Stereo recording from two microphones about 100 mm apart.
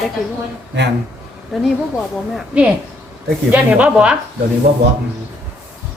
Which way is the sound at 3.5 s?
15° right (ahead or behind).